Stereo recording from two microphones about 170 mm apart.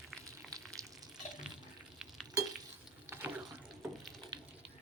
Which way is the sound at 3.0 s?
15° right (ahead or behind).